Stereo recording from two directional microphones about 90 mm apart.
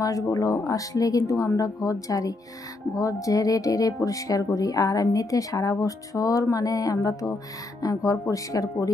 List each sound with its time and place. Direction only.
0.0 s speech: 40° left (ahead or behind)